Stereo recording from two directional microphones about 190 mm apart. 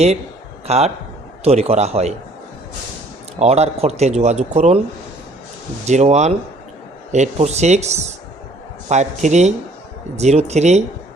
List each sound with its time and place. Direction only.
0.7 s speech: 35° right (ahead or behind)
3.3 s speech: 35° right (ahead or behind)
5.8 s speech: 35° right (ahead or behind)